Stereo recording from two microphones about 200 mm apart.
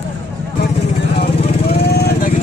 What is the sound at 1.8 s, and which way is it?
Vehicle, 55° left (ahead or behind).